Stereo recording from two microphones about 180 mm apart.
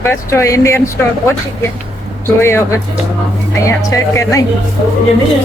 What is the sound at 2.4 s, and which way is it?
A woman's voice, 15° left (ahead or behind).